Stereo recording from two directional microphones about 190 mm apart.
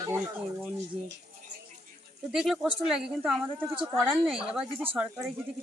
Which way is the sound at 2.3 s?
5° right (ahead or behind).